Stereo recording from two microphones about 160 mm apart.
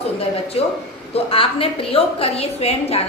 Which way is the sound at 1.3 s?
35° left (ahead or behind).